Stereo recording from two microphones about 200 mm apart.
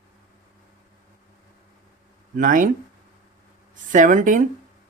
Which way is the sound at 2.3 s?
40° right (ahead or behind).